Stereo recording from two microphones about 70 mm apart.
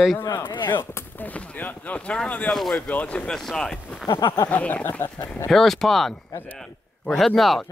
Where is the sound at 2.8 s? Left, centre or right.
Centre.